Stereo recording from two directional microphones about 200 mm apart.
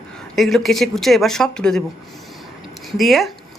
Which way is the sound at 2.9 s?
Centre (ahead or behind).